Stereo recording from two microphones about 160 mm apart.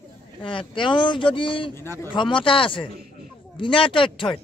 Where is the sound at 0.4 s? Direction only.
30° left (ahead or behind).